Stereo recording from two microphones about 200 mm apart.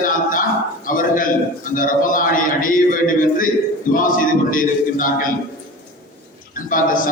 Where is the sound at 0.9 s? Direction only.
45° left (ahead or behind).